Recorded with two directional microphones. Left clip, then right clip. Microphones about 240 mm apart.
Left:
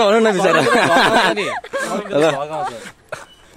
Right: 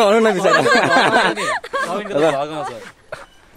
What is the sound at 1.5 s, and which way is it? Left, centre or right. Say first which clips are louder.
Speech: right 2 dB; right.